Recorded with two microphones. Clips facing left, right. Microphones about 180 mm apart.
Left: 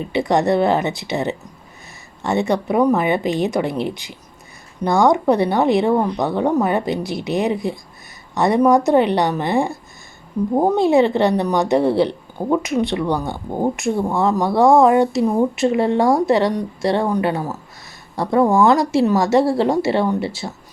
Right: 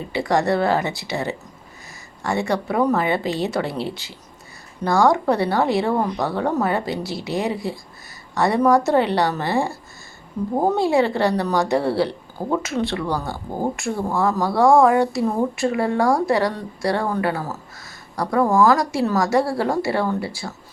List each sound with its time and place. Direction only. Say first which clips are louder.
0.0 s a woman's voice: left 3 dB; 20° left (ahead or behind)